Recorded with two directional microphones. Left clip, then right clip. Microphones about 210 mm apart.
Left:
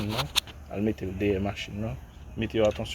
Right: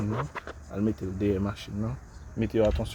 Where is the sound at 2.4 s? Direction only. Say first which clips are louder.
Even; 45° right (ahead or behind).